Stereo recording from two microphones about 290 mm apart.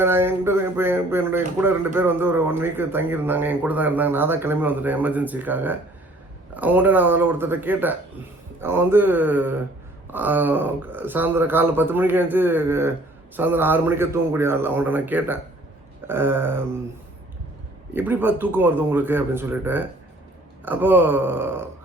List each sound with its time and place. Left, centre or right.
0.0 s speech: centre
17.9 s speech: centre